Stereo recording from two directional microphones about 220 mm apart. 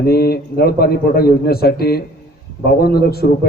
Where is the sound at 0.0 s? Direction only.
45° left (ahead or behind).